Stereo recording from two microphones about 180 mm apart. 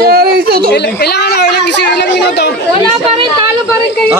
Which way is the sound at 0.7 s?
65° left (ahead or behind).